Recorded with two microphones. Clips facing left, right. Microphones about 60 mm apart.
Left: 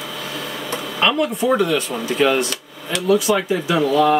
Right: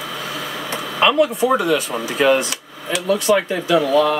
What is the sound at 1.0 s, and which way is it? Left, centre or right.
Speech, centre.